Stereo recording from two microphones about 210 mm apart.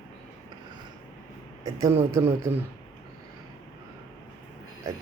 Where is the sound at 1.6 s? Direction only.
15° right (ahead or behind).